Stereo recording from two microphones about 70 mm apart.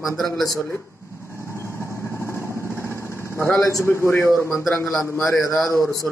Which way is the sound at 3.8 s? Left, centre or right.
Left.